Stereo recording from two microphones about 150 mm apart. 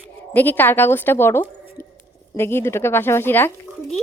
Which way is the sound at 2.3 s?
15° left (ahead or behind).